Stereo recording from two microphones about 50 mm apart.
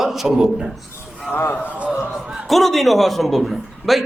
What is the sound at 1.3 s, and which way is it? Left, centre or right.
Speech, left.